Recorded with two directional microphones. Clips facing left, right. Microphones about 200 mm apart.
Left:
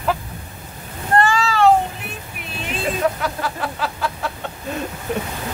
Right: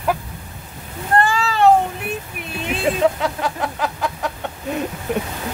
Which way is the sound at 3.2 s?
20° right (ahead or behind).